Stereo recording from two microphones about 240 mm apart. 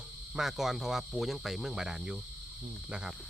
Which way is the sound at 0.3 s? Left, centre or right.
Centre.